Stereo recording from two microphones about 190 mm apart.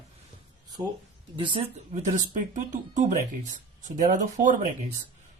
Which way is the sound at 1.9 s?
40° right (ahead or behind).